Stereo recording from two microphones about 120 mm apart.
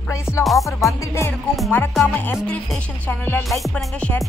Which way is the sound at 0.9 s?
25° left (ahead or behind).